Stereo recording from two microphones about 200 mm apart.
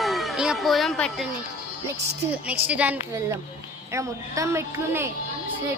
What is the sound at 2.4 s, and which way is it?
Speech, 5° right (ahead or behind).